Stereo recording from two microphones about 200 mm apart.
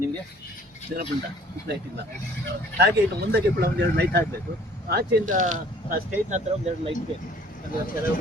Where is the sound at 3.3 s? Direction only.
55° right (ahead or behind).